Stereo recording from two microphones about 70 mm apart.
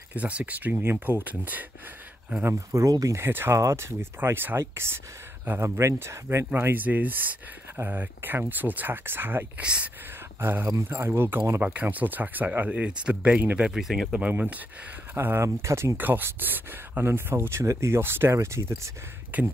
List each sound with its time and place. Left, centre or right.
0.1 s speech: centre
2.4 s speech: right
3.2 s speech: right
5.6 s speech: right
13.6 s speech: centre
15.1 s speech: right
16.0 s speech: right
19.3 s speech: right